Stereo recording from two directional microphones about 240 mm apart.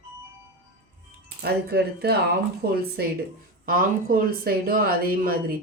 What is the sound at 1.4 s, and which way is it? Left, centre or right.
Speech, right.